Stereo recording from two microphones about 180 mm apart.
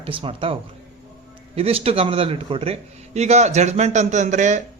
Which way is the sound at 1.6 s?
35° right (ahead or behind).